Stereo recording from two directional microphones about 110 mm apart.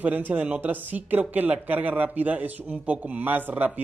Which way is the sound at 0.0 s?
15° right (ahead or behind).